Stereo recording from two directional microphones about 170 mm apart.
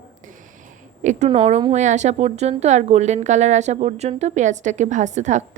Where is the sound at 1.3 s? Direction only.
40° right (ahead or behind).